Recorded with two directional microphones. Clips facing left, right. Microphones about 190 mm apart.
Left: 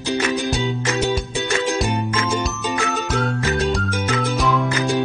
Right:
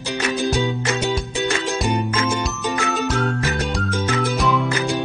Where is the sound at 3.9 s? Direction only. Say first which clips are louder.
Right 1 dB; 15° left (ahead or behind).